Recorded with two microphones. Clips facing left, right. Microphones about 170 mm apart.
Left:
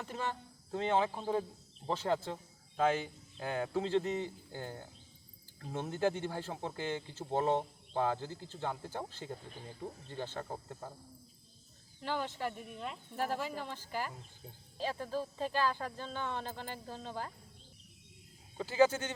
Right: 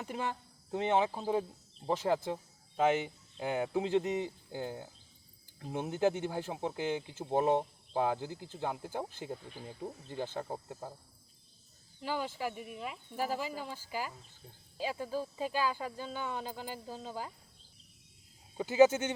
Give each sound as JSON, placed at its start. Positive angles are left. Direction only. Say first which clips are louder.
{"t": 0.0, "sound": "speech", "louder": "right 2 dB", "side_deg": -15}
{"t": 1.1, "sound": "speech", "louder": "right 2 dB", "side_deg": -5}
{"t": 12.0, "sound": "speech", "louder": "right 1 dB", "side_deg": -10}
{"t": 18.5, "sound": "a man's voice", "louder": "right 4 dB", "side_deg": -20}